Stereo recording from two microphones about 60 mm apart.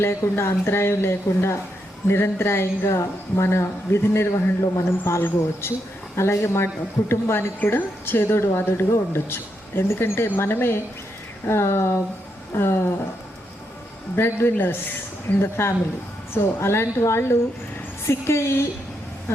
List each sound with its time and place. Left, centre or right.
0.0 s speech: left
7.6 s a woman's voice: left
14.2 s a woman's voice: left